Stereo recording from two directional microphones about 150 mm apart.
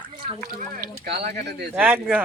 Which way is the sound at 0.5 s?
75° right (ahead or behind).